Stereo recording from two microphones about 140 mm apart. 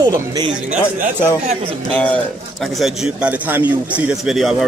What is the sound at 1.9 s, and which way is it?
Speech, 10° left (ahead or behind).